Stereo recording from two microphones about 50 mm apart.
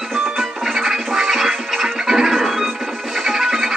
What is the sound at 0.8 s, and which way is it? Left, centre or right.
Music, centre.